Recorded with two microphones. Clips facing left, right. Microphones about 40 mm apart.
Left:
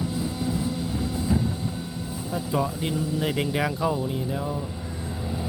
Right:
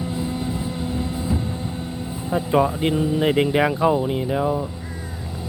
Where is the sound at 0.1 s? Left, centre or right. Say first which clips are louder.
Right 2 dB; right.